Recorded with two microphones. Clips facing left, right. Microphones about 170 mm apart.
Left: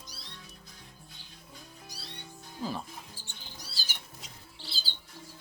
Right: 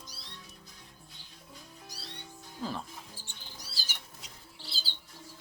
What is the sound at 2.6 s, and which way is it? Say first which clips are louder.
Speech: left 1 dB; 5° left (ahead or behind).